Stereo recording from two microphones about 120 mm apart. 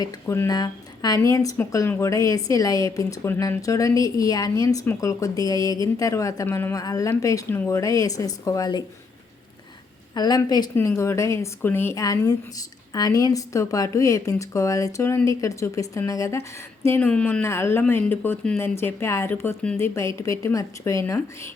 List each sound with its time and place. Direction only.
0.0 s a woman's voice: 30° left (ahead or behind)
10.2 s a woman's voice: 35° left (ahead or behind)
10.8 s speech: 20° left (ahead or behind)
17.4 s speech: 20° left (ahead or behind)